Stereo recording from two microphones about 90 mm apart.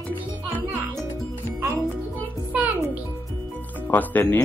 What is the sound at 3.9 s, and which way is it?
Speech, 20° left (ahead or behind).